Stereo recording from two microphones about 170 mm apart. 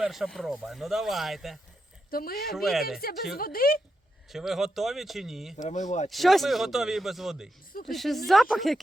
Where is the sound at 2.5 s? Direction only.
Centre (ahead or behind).